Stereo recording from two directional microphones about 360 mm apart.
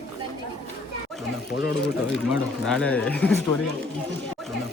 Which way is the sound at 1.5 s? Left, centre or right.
Left.